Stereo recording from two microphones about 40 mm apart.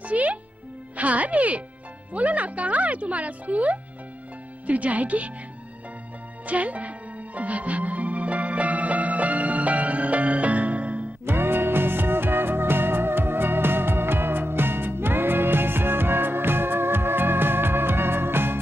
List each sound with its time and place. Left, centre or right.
0.1 s music: right
0.9 s a child's voice: right
6.4 s music: right
11.2 s music: right